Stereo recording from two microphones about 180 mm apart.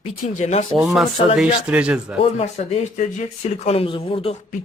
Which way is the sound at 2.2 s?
35° left (ahead or behind).